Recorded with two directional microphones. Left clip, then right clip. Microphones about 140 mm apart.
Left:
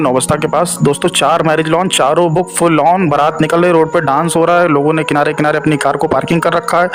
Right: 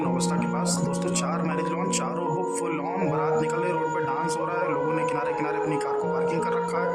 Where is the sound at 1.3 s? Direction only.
90° left.